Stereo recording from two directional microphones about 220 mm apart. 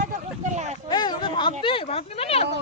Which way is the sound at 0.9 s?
20° left (ahead or behind).